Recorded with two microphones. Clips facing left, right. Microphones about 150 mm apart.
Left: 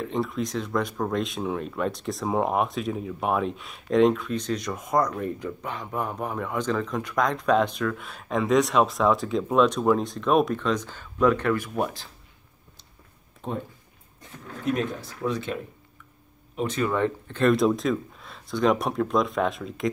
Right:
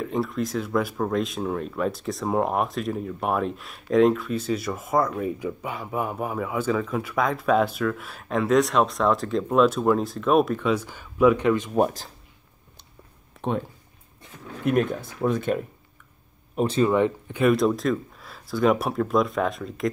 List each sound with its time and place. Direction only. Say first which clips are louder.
0.0 s speech: right 1 dB; centre (ahead or behind); by 11.7 s 20° right (ahead or behind)
11.7 s speech: right 6 dB; 40° right (ahead or behind)
13.4 s a sound: right 6 dB; 70° right (ahead or behind)
14.6 s speech: right 4 dB; 55° right (ahead or behind)
16.6 s speech: right 5 dB; 30° right (ahead or behind)
16.9 s speech: right 4 dB; 15° right (ahead or behind)
17.6 s speech: even; centre (ahead or behind)